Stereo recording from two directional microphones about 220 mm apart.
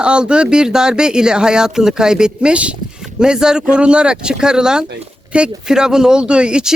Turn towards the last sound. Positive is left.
turn(degrees=-5)  # may be behind; listen again after turning